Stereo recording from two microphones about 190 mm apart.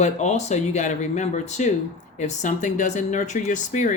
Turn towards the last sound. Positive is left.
turn(degrees=40)  # may be behind; listen again after turning